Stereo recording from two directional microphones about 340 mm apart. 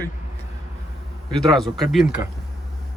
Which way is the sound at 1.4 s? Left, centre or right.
Centre.